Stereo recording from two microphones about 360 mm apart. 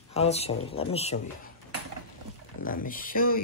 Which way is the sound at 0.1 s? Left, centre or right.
Centre.